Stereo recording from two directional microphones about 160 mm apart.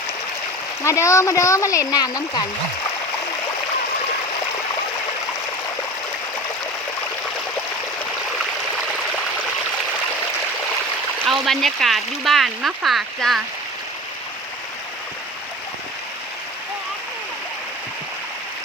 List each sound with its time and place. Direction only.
0.9 s speech: 20° left (ahead or behind)
11.3 s speech: centre (ahead or behind)